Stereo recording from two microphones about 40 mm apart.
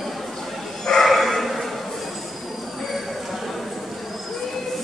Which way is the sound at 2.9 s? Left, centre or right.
Centre.